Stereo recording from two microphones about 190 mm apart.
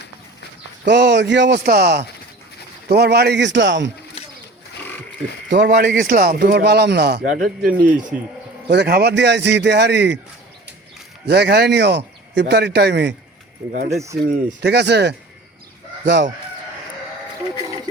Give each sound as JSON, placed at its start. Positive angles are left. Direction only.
{"t": 0.9, "sound": "speech", "side_deg": -65}
{"t": 5.5, "sound": "speech", "side_deg": -65}
{"t": 7.7, "sound": "speech", "side_deg": -10}
{"t": 8.7, "sound": "speech", "side_deg": -60}
{"t": 11.3, "sound": "speech", "side_deg": -60}
{"t": 14.6, "sound": "speech", "side_deg": -60}
{"t": 16.0, "sound": "chicken", "side_deg": -70}